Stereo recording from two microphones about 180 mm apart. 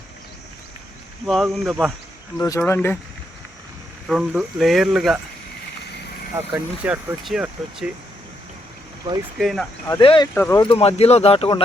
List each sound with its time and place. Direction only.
1.3 s speech: centre (ahead or behind)
2.4 s speech: 15° left (ahead or behind)
4.0 s speech: centre (ahead or behind)
6.3 s speech: 10° right (ahead or behind)
9.4 s speech: centre (ahead or behind)
10.0 s speech: 30° left (ahead or behind)
10.3 s speech: 10° left (ahead or behind)
10.6 s speech: 30° left (ahead or behind)